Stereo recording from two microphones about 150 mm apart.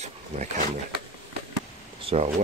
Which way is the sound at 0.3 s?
45° right (ahead or behind).